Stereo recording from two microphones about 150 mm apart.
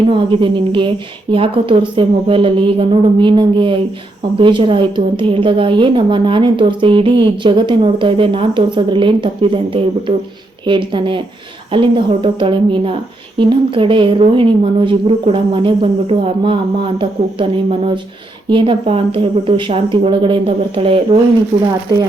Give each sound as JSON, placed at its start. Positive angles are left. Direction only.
{"t": 0.1, "sound": "a woman's voice", "side_deg": -35}
{"t": 21.9, "sound": "speech", "side_deg": -25}